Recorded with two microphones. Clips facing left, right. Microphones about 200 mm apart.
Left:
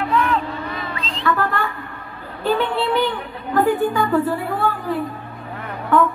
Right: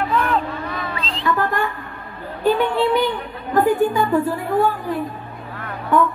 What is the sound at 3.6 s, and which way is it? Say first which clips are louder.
Speech: right 1 dB; 15° right (ahead or behind).